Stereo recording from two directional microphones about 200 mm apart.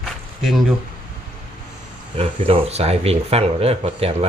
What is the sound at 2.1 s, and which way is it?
Speech, 30° right (ahead or behind).